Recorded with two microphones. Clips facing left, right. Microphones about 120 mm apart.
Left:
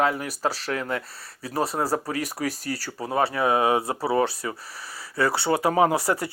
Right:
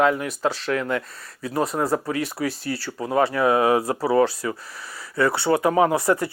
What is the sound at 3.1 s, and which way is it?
Speech, 30° left (ahead or behind).